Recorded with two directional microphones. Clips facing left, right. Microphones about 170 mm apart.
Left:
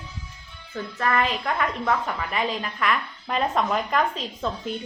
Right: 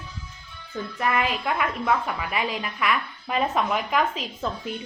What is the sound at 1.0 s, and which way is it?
A woman's voice, 15° right (ahead or behind).